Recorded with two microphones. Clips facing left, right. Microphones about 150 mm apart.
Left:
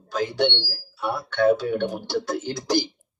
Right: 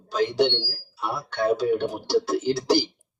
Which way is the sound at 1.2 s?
40° right (ahead or behind).